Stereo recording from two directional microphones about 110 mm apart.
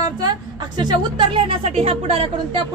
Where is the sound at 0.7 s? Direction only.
45° right (ahead or behind).